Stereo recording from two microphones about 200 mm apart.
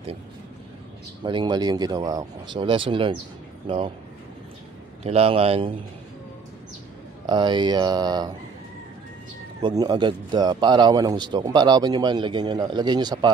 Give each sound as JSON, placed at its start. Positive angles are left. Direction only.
{"t": 1.2, "sound": "a man's voice", "side_deg": -20}
{"t": 5.0, "sound": "a man's voice", "side_deg": -30}
{"t": 7.2, "sound": "a man's voice", "side_deg": -20}
{"t": 9.6, "sound": "a man's voice", "side_deg": -20}